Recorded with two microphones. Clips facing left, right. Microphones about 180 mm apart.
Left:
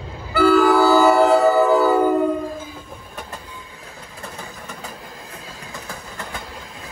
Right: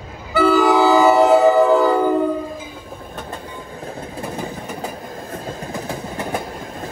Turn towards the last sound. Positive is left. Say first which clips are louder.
# right 7 dB
turn(degrees=-55)  # may be behind; listen again after turning